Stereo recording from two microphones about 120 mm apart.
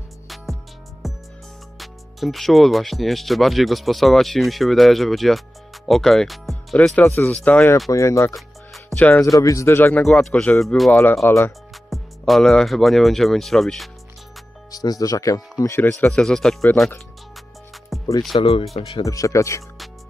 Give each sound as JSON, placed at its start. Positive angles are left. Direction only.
{"t": 1.0, "sound": "music", "side_deg": 0}
{"t": 1.8, "sound": "speech", "side_deg": 0}
{"t": 7.0, "sound": "speech", "side_deg": 20}
{"t": 7.9, "sound": "speech", "side_deg": 25}
{"t": 8.3, "sound": "music", "side_deg": 0}
{"t": 8.9, "sound": "speech", "side_deg": 15}
{"t": 10.0, "sound": "speech", "side_deg": 5}
{"t": 10.9, "sound": "speech", "side_deg": 15}
{"t": 11.7, "sound": "speech", "side_deg": 0}
{"t": 14.7, "sound": "speech", "side_deg": 30}
{"t": 16.1, "sound": "speech", "side_deg": 5}
{"t": 17.9, "sound": "music", "side_deg": 0}
{"t": 18.3, "sound": "speech", "side_deg": 50}
{"t": 19.0, "sound": "speech", "side_deg": 25}